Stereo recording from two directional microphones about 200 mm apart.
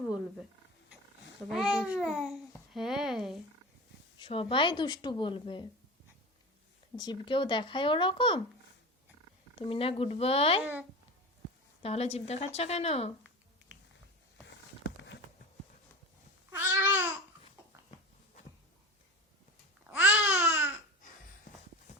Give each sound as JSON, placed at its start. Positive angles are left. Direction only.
{"t": 1.4, "sound": "speech", "side_deg": 0}
{"t": 4.2, "sound": "speech", "side_deg": 25}
{"t": 6.9, "sound": "speech", "side_deg": 20}
{"t": 9.6, "sound": "speech", "side_deg": 30}
{"t": 10.6, "sound": "speech", "side_deg": -10}
{"t": 11.8, "sound": "a woman's voice", "side_deg": 30}
{"t": 14.4, "sound": "a sound", "side_deg": 60}
{"t": 16.5, "sound": "babbling", "side_deg": -10}
{"t": 19.9, "sound": "babbling", "side_deg": -10}